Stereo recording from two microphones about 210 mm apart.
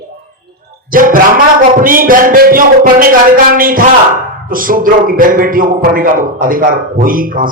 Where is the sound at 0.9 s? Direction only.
40° right (ahead or behind).